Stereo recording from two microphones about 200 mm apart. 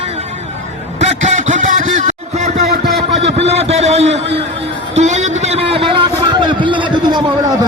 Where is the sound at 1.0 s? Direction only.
35° right (ahead or behind).